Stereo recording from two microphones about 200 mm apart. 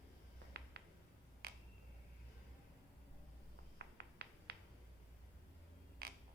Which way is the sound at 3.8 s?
55° right (ahead or behind).